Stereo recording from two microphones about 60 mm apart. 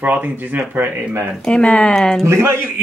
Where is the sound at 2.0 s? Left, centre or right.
Centre.